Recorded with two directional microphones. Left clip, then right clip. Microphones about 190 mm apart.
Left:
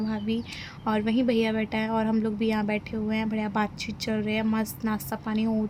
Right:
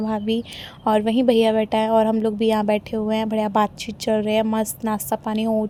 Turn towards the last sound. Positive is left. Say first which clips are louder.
# right 8 dB
turn(degrees=-35)  # may be behind; listen again after turning